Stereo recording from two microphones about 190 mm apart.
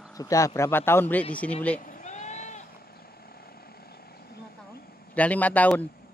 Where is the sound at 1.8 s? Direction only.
40° left (ahead or behind).